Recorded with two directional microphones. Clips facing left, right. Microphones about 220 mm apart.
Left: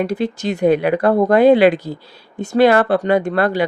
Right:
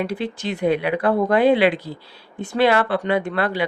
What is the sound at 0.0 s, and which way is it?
Speech, 45° left (ahead or behind).